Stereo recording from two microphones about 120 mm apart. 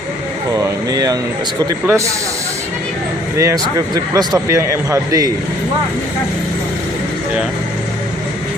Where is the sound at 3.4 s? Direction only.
25° right (ahead or behind).